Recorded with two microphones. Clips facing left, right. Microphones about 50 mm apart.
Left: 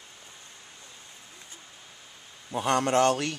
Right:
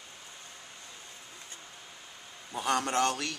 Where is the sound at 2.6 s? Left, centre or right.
Left.